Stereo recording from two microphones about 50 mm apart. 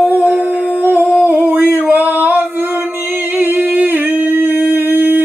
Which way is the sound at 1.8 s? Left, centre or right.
Right.